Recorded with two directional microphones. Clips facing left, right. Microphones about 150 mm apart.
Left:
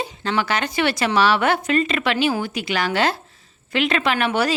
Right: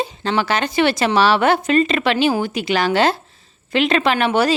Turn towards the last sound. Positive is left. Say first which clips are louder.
# right 4 dB
turn(degrees=-30)  # may be behind; listen again after turning